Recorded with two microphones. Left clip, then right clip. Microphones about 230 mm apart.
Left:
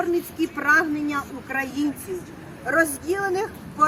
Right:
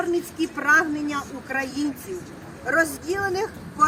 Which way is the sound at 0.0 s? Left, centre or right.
Centre.